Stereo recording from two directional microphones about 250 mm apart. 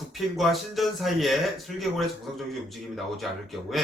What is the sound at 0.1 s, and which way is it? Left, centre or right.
Speech, centre.